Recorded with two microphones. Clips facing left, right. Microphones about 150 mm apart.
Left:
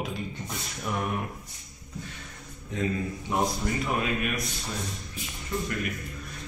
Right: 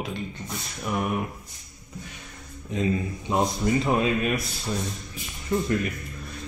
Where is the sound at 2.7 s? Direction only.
20° right (ahead or behind).